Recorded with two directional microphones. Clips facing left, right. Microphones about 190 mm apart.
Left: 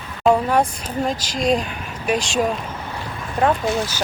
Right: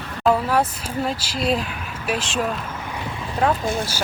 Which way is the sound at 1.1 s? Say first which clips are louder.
Left 3 dB; 5° right (ahead or behind).